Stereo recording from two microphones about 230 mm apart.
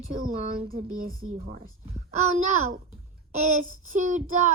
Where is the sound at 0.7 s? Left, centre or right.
Right.